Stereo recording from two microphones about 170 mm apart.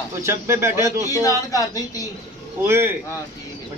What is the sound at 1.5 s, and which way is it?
Speech, 20° left (ahead or behind).